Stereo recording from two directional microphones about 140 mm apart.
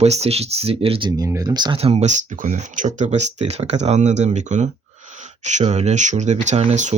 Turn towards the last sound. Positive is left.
turn(degrees=-55)  # may be behind; listen again after turning